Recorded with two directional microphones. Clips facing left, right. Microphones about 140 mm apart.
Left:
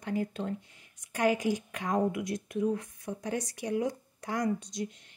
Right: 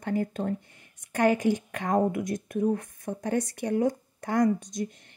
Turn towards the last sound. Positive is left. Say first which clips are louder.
# right 5 dB
turn(degrees=-50)  # may be behind; listen again after turning